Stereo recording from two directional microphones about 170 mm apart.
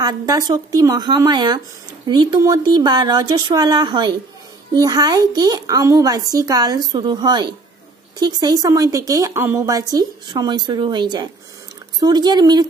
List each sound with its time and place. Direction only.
0.0 s a woman's voice: 20° right (ahead or behind)